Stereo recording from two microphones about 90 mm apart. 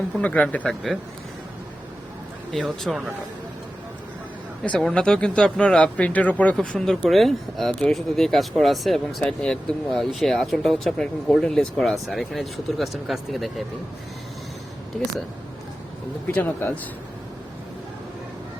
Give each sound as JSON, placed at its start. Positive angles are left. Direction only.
{"t": 0.2, "sound": "speech", "side_deg": 15}
{"t": 0.7, "sound": "speech", "side_deg": 0}
{"t": 2.5, "sound": "speech", "side_deg": 0}
{"t": 4.6, "sound": "speech", "side_deg": 15}
{"t": 6.7, "sound": "speech", "side_deg": 5}
{"t": 16.3, "sound": "speech", "side_deg": 20}